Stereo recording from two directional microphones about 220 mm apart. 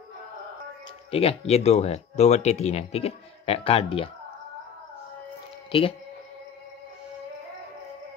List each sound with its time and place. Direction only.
1.1 s speech: 25° left (ahead or behind)
5.7 s speech: 25° left (ahead or behind)